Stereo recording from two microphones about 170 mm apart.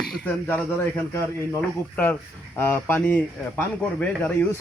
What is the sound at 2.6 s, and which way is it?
Speech, 10° left (ahead or behind).